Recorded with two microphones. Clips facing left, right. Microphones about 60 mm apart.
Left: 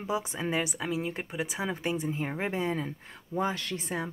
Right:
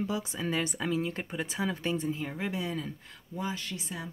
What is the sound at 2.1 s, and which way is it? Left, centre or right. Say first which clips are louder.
Speech: left 2 dB; left.